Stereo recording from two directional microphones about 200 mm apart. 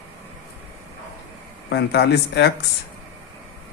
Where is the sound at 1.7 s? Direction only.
55° left (ahead or behind).